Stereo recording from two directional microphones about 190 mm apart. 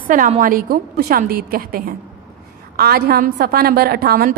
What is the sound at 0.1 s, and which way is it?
A woman's voice, 45° right (ahead or behind).